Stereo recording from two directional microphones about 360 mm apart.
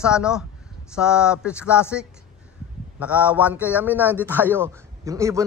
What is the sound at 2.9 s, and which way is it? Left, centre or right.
A man's voice, centre.